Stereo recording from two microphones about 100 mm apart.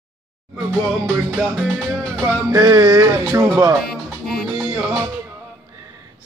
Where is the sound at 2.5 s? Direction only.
35° right (ahead or behind).